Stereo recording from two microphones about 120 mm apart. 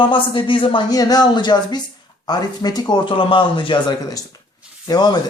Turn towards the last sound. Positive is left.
turn(degrees=35)  # may be behind; listen again after turning